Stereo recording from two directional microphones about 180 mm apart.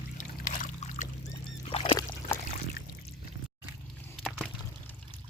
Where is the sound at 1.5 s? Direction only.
30° left (ahead or behind).